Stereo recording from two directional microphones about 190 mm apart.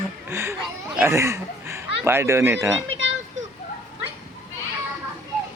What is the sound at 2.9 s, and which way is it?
Children playing, 80° right.